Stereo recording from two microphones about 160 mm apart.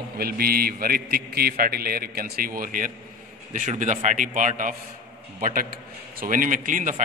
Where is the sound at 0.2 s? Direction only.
70° right (ahead or behind).